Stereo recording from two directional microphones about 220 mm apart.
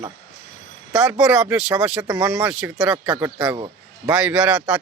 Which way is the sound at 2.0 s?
15° right (ahead or behind).